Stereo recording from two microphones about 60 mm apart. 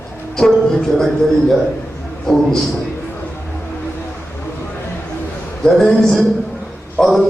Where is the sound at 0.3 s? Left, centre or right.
Centre.